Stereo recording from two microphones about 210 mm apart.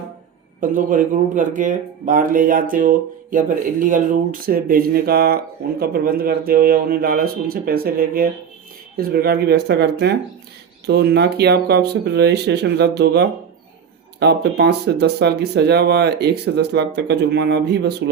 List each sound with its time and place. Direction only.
0.6 s speech: 40° right (ahead or behind)